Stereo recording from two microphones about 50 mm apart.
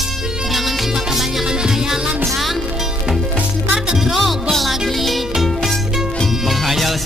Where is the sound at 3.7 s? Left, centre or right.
Centre.